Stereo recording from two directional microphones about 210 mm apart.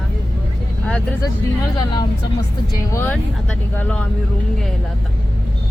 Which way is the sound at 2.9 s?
10° left (ahead or behind).